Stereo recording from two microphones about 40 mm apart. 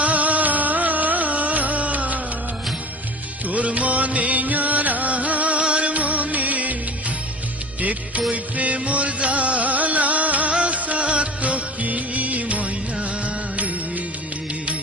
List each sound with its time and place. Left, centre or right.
0.0 s music: right
3.4 s music: right
7.8 s music: right
10.5 s music of bollywood: right